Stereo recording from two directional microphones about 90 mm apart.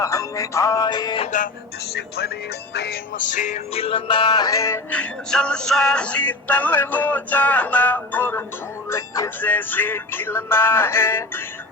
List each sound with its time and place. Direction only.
0.0 s music: 40° left (ahead or behind)
0.9 s music: 50° left (ahead or behind)
3.7 s music: 90° left; by 4.8 s 35° left (ahead or behind)
4.9 s synthetic singing: 15° left (ahead or behind)
8.9 s music: 35° left (ahead or behind)
9.4 s music: 20° left (ahead or behind)